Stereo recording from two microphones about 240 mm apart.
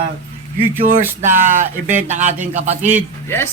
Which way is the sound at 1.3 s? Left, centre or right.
Right.